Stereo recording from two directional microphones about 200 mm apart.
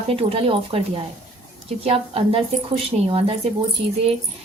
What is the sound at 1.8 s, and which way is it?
A woman's voice, 30° right (ahead or behind).